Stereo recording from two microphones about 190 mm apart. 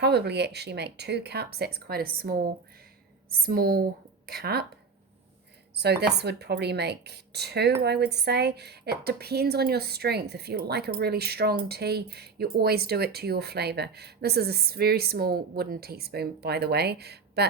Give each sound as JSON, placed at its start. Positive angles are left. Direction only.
{"t": 0.0, "sound": "a woman's voice", "side_deg": -60}
{"t": 5.7, "sound": "a woman's voice", "side_deg": -60}